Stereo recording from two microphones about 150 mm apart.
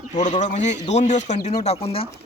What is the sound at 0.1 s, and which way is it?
Speech, 50° left (ahead or behind).